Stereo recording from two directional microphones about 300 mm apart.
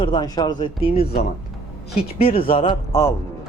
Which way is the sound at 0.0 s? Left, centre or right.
Centre.